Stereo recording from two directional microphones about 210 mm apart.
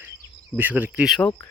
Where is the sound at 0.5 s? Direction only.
10° right (ahead or behind).